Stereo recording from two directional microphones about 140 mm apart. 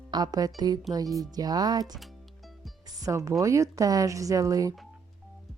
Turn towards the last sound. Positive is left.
turn(degrees=-25)  # may be behind; listen again after turning